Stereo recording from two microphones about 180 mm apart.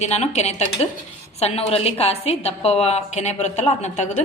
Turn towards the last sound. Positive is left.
turn(degrees=40)  # may be behind; listen again after turning